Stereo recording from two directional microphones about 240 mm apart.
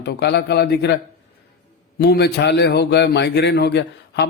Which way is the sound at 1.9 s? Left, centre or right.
Left.